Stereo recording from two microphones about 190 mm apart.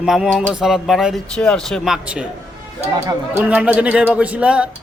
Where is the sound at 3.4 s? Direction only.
5° right (ahead or behind).